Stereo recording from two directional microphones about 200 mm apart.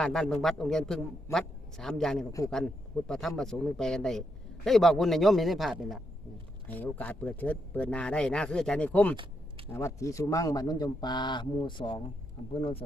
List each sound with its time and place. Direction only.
0.0 s a man's voice: 5° left (ahead or behind); by 12.8 s 25° left (ahead or behind)